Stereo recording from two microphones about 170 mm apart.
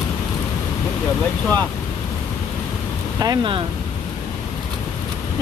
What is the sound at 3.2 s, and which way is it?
Speech, 25° right (ahead or behind).